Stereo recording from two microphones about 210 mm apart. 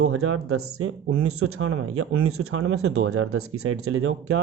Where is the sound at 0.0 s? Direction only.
85° right.